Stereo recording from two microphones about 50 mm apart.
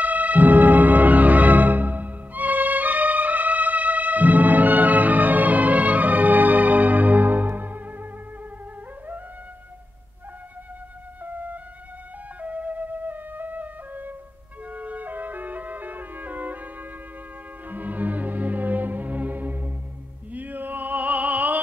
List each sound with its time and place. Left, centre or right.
0.0 s music: right
11.2 s music: right
20.3 s opera: right